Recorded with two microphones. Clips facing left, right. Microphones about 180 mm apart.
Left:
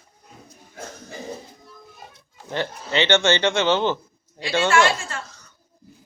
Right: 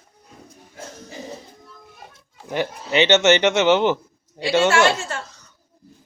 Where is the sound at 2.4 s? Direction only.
15° right (ahead or behind).